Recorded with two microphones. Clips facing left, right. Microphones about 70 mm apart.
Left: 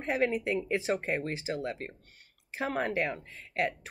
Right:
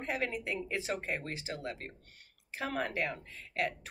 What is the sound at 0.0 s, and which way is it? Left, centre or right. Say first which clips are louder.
Speech: left 7 dB; left.